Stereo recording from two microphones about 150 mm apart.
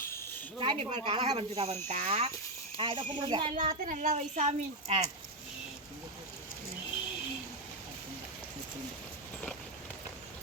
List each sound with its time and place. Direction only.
0.6 s speech: 40° right (ahead or behind)
2.7 s speech: 35° right (ahead or behind)
3.5 s a woman's voice: 65° right (ahead or behind)